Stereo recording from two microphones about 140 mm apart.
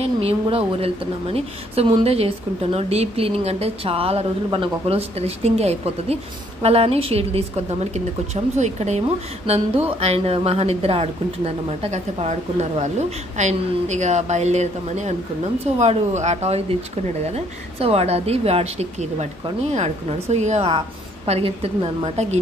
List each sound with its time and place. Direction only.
0.0 s a woman's voice: 45° right (ahead or behind)
21.3 s a woman's voice: 40° right (ahead or behind)
22.0 s a woman's voice: 55° right (ahead or behind)